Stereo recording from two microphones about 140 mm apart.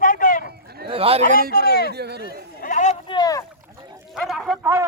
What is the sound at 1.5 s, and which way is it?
Speech, 90° left.